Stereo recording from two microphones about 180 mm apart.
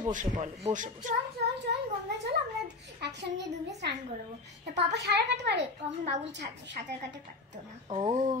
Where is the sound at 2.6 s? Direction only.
75° right (ahead or behind).